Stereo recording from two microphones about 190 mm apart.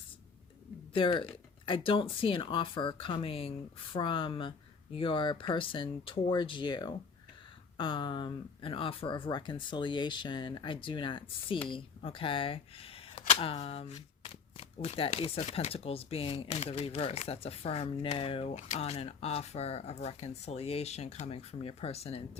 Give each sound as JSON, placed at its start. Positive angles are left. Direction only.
{"t": 0.9, "sound": "speech", "side_deg": 25}